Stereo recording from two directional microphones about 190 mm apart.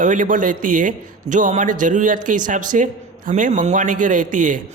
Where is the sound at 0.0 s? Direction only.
45° right (ahead or behind).